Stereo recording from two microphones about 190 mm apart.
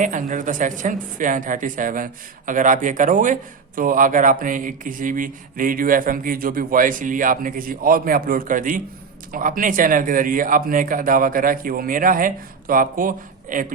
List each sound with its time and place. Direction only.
0.0 s speech: 40° right (ahead or behind)